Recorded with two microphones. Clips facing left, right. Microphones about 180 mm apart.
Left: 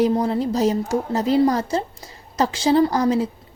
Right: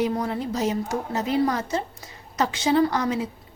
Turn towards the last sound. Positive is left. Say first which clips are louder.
# left 4 dB
turn(degrees=35)  # may be behind; listen again after turning